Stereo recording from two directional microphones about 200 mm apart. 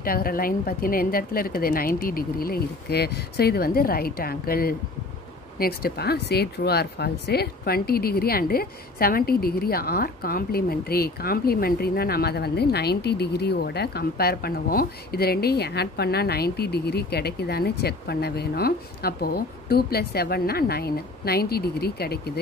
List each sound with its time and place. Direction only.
0.0 s speech: 45° left (ahead or behind)